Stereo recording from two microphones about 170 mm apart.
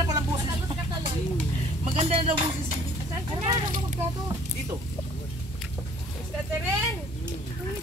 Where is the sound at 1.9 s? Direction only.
35° right (ahead or behind).